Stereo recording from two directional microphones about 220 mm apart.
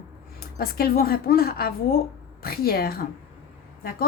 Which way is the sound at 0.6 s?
45° left (ahead or behind).